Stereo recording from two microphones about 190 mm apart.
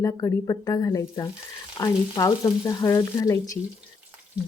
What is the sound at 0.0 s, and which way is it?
A woman's voice, 20° left (ahead or behind).